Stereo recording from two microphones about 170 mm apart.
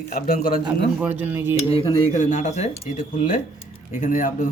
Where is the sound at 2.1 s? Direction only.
45° left (ahead or behind).